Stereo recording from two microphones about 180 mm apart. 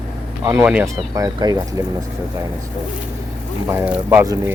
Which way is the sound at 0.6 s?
5° right (ahead or behind).